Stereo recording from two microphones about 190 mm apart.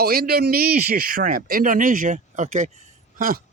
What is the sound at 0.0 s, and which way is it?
Speech, 50° right (ahead or behind).